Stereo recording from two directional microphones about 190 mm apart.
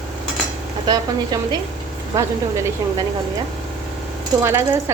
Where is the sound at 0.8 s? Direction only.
20° right (ahead or behind).